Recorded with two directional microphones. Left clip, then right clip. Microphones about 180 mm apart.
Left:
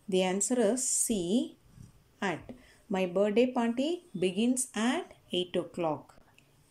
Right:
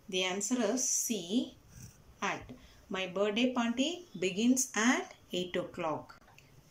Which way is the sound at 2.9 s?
30° left (ahead or behind).